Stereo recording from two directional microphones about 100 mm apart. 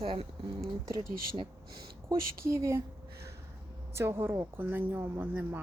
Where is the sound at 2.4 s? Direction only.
30° right (ahead or behind).